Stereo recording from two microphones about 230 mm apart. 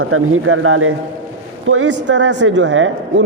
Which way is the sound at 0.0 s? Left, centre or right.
Right.